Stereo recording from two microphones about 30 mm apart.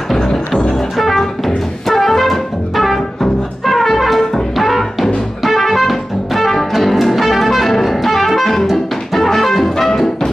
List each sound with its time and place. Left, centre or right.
0.9 s music: centre